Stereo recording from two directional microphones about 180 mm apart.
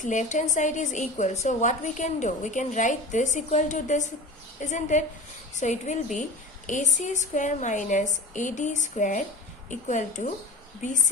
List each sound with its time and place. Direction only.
0.0 s a woman's voice: 45° left (ahead or behind)